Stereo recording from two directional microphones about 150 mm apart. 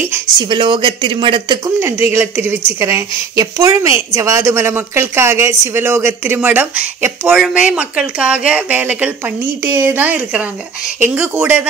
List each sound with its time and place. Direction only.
0.4 s speech: 30° right (ahead or behind)
1.8 s speech: 15° right (ahead or behind)